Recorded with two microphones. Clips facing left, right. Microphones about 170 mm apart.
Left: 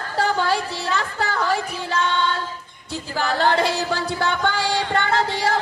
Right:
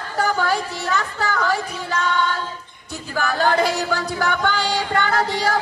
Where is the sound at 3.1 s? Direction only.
30° left (ahead or behind).